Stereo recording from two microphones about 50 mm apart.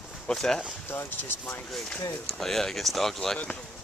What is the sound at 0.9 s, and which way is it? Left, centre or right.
Speech, left.